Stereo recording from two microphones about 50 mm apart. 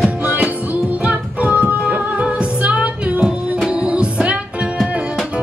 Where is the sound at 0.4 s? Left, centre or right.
Right.